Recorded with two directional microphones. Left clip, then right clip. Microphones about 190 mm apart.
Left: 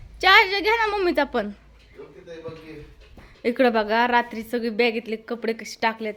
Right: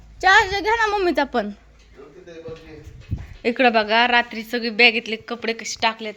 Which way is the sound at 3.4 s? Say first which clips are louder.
Right 3 dB; 15° left (ahead or behind).